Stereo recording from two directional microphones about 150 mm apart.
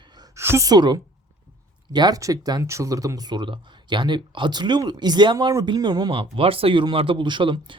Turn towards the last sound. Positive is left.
turn(degrees=-35)  # may be behind; listen again after turning